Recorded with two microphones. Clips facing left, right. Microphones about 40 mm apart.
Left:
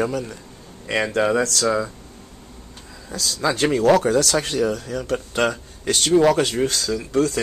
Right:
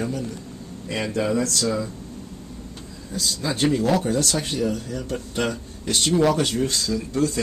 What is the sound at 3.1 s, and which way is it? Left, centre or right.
Speech, left.